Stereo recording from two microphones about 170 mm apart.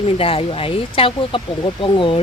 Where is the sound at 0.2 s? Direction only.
35° left (ahead or behind).